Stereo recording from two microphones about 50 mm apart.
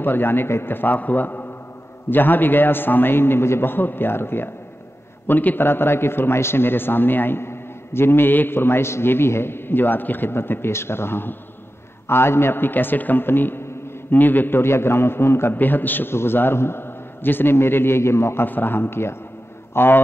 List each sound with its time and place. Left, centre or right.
0.0 s a man's voice: left
5.2 s a man's voice: left
14.6 s a man's voice: left
15.5 s a man's voice: left
18.4 s a man's voice: left